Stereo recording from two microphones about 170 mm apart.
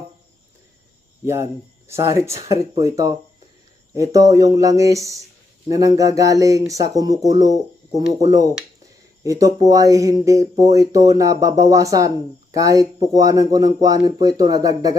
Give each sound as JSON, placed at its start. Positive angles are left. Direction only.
{"t": 1.2, "sound": "speech", "side_deg": -15}